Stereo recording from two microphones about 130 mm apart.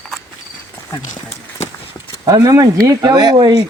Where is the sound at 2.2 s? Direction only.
25° right (ahead or behind).